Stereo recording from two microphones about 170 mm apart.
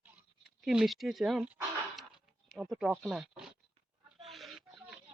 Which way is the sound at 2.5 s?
5° right (ahead or behind).